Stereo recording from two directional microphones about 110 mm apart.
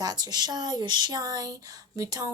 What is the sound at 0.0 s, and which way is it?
A woman's voice, 35° right (ahead or behind).